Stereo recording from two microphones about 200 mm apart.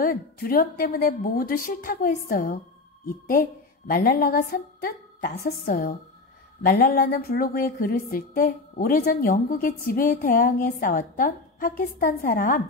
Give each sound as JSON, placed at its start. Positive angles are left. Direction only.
{"t": 0.0, "sound": "a woman's voice", "side_deg": 45}